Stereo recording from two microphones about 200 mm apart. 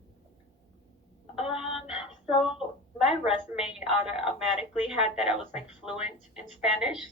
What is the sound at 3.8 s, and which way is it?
A woman's voice, 5° right (ahead or behind).